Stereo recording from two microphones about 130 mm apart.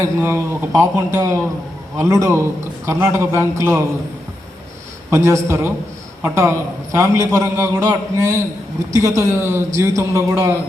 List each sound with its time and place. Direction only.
0.0 s speech: 20° right (ahead or behind)
5.1 s speech: 20° right (ahead or behind)